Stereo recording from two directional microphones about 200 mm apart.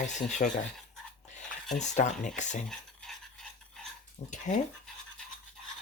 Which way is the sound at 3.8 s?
5° left (ahead or behind).